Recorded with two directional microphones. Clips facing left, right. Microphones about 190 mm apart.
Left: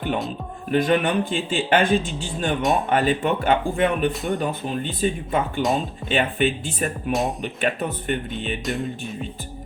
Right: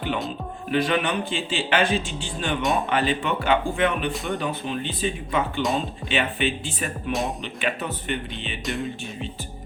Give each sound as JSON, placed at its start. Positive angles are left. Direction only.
{"t": 0.7, "sound": "speech", "side_deg": 45}
{"t": 2.6, "sound": "speech", "side_deg": 0}
{"t": 2.9, "sound": "speech", "side_deg": 45}
{"t": 4.1, "sound": "speech", "side_deg": 0}
{"t": 4.4, "sound": "speech", "side_deg": 45}
{"t": 5.6, "sound": "speech", "side_deg": 0}
{"t": 6.1, "sound": "speech", "side_deg": 50}
{"t": 7.1, "sound": "speech", "side_deg": 0}
{"t": 7.4, "sound": "speech", "side_deg": 45}
{"t": 8.6, "sound": "speech", "side_deg": 0}